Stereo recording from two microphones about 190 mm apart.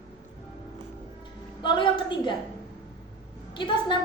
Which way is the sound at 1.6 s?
25° left (ahead or behind).